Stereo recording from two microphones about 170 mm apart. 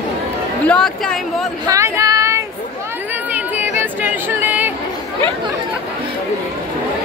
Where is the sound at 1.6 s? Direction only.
20° right (ahead or behind).